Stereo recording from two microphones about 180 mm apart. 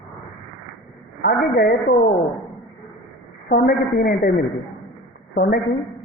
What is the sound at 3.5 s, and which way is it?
Speech, 55° left (ahead or behind).